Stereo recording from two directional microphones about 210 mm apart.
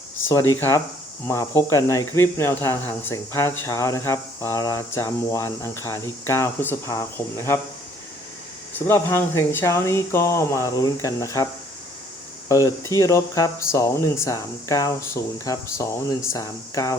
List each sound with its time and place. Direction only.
0.3 s speech: 15° left (ahead or behind)
8.9 s speech: 10° left (ahead or behind)
12.5 s speech: 15° left (ahead or behind)